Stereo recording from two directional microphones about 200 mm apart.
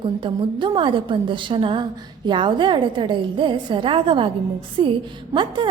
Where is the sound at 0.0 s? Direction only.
25° right (ahead or behind).